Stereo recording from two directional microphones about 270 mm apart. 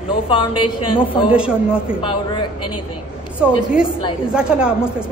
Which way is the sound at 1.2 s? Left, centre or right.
Centre.